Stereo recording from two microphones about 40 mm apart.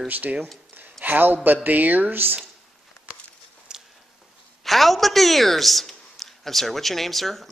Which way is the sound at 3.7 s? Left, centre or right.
Centre.